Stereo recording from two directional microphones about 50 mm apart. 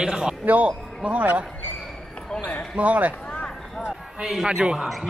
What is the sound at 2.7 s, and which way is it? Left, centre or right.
Speech, right.